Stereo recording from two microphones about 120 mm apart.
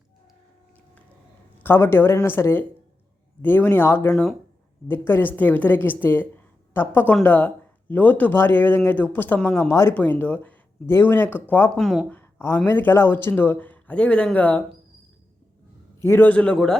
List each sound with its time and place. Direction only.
1.6 s speech: 20° left (ahead or behind)
11.8 s speech: centre (ahead or behind)
12.0 s speech: 15° left (ahead or behind)
16.0 s speech: 15° left (ahead or behind)